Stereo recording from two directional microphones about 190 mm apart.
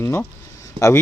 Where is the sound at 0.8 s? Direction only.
20° right (ahead or behind).